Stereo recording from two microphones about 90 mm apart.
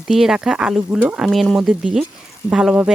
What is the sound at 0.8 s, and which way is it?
Speech, 20° right (ahead or behind).